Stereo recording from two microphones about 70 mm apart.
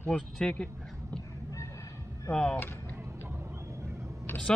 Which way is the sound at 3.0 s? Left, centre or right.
Right.